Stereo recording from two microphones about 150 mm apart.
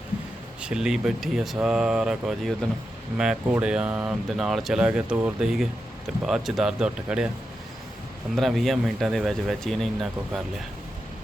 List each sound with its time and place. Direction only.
0.6 s speech: 5° right (ahead or behind)
8.4 s speech: centre (ahead or behind)